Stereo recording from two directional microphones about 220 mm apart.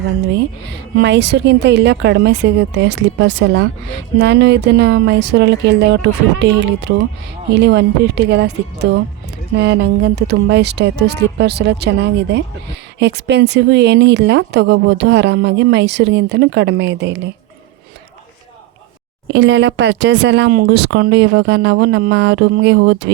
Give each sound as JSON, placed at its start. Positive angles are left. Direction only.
{"t": 0.9, "sound": "speech", "side_deg": -50}
{"t": 19.3, "sound": "speech", "side_deg": -55}